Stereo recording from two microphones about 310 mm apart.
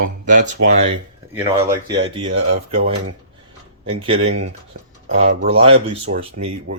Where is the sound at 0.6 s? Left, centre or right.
Right.